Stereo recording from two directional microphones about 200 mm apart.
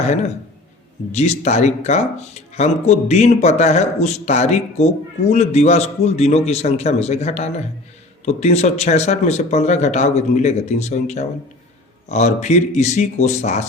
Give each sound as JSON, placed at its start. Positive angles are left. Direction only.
{"t": 0.0, "sound": "speech", "side_deg": 35}